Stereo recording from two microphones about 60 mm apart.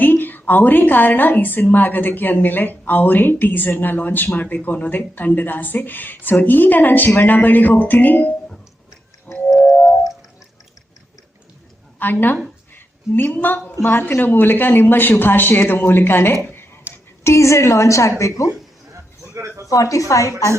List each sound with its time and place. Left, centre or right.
0.0 s a woman's voice: left
9.3 s music: centre
11.9 s a woman's voice: left
16.9 s a sound: right
17.2 s a woman's voice: left
19.3 s a sound: right
19.7 s a woman's voice: left